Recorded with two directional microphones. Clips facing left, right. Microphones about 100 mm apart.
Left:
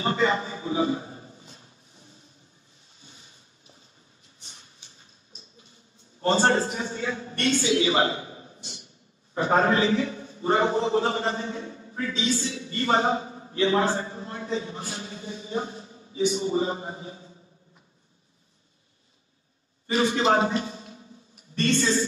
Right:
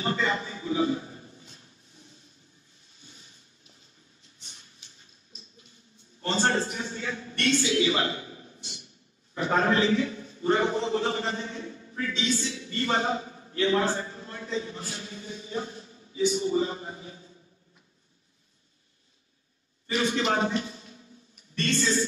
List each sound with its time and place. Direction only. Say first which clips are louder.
0.0 s a sound: left 4 dB; 25° left (ahead or behind)
6.2 s a man's voice: left 5 dB; 35° left (ahead or behind)
7.6 s a man's voice: left 3 dB; 25° left (ahead or behind)
19.9 s a man's voice: left 4 dB; 30° left (ahead or behind)